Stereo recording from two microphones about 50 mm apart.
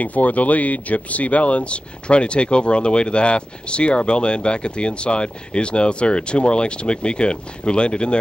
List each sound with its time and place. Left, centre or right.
0.0 s speech: left